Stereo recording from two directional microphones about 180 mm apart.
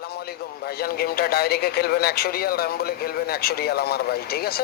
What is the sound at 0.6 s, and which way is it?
Speech, 60° left (ahead or behind).